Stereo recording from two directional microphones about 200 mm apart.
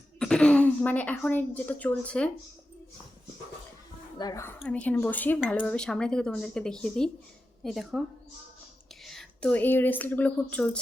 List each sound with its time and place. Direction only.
0.2 s speech: 5° left (ahead or behind)
4.2 s speech: 15° left (ahead or behind); by 8.0 s centre (ahead or behind)
9.0 s speech: 5° left (ahead or behind)